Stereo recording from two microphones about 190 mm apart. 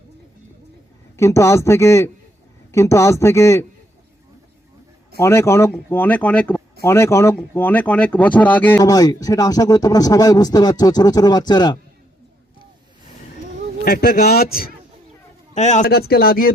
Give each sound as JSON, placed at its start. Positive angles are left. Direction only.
{"t": 1.1, "sound": "a man's voice", "side_deg": 15}
{"t": 5.2, "sound": "a man's voice", "side_deg": 15}
{"t": 13.8, "sound": "a man's voice", "side_deg": 50}
{"t": 15.5, "sound": "a man's voice", "side_deg": 40}
{"t": 15.9, "sound": "a man's voice", "side_deg": 55}